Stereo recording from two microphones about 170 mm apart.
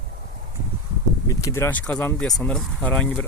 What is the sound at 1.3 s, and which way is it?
Speech, 20° left (ahead or behind).